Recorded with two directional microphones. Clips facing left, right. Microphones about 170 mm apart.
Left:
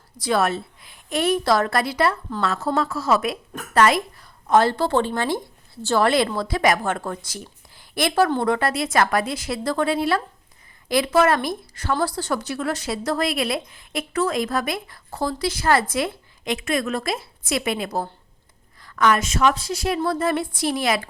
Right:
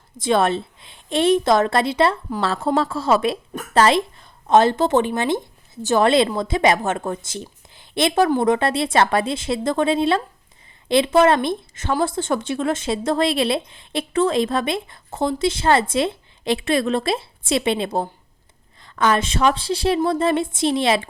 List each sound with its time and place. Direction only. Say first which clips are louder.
0.2 s speech: right 3 dB; 25° right (ahead or behind)